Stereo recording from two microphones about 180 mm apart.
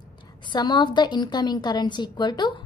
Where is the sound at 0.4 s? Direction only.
25° left (ahead or behind).